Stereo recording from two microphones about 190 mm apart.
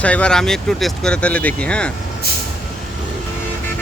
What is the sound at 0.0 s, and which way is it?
Speech, 5° left (ahead or behind).